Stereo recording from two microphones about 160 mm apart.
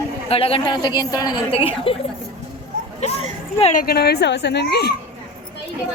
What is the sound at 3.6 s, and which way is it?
Speech, 55° left (ahead or behind).